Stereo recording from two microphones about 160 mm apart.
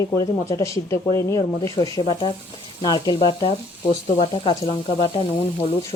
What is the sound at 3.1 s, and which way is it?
Speech, 35° left (ahead or behind).